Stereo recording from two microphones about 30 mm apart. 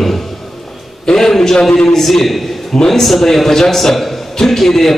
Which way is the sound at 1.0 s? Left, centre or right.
Centre.